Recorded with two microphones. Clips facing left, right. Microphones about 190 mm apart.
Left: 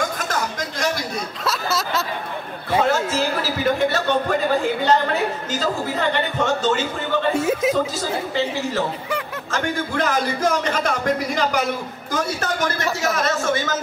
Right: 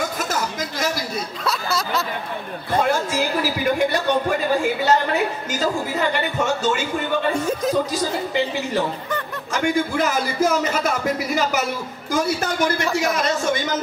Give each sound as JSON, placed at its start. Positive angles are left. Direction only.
{"t": 0.3, "sound": "a sound", "side_deg": -5}
{"t": 2.8, "sound": "a man's voice", "side_deg": -10}
{"t": 7.3, "sound": "speech", "side_deg": 5}
{"t": 7.9, "sound": "a man's voice", "side_deg": -15}